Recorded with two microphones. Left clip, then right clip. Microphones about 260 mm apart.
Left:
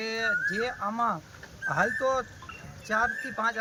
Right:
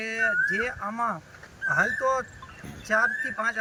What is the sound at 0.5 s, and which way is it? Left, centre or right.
Speech, centre.